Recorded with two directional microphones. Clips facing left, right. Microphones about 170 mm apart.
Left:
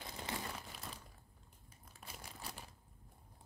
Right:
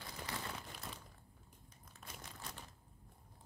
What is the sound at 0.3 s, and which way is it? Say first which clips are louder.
Crumpling: left 2 dB; 25° left (ahead or behind).